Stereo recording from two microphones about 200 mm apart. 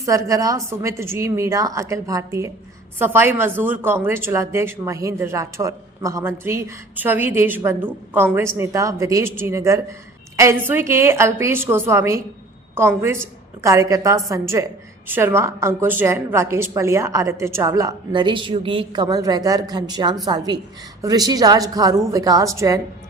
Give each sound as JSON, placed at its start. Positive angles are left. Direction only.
{"t": 0.0, "sound": "a woman's voice", "side_deg": -15}